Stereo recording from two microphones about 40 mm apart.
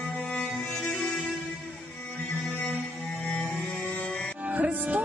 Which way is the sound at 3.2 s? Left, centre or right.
Left.